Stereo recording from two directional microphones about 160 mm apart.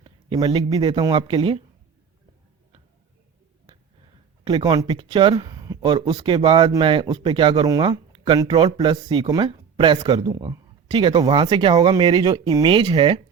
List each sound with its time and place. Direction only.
0.0 s speech: 30° right (ahead or behind)
4.4 s speech: 30° right (ahead or behind)